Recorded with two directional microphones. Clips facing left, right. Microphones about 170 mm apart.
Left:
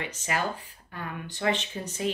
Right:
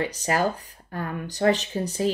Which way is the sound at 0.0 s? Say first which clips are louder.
Right 7 dB; 35° right (ahead or behind).